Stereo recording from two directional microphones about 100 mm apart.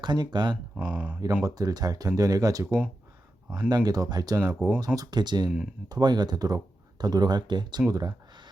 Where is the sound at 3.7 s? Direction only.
40° right (ahead or behind).